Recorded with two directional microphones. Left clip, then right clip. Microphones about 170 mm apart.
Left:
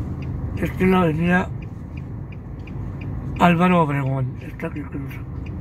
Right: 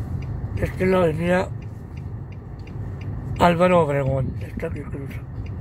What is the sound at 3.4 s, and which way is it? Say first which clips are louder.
A man's voice: right 1 dB; 10° right (ahead or behind).